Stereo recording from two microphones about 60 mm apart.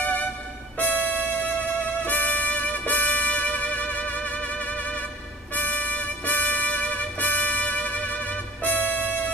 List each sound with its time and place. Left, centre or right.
0.0 s music: left
5.6 s music: left